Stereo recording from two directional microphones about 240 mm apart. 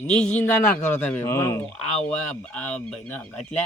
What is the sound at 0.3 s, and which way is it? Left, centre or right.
Speech, centre.